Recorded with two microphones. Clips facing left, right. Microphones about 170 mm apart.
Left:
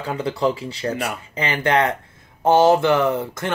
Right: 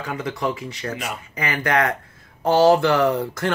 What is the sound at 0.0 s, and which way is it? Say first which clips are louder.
Speech: left 4 dB; 30° left (ahead or behind).